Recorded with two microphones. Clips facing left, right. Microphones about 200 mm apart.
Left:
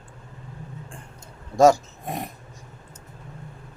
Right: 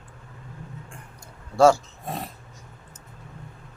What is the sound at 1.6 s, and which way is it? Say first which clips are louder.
Speech: left 1 dB; 15° left (ahead or behind).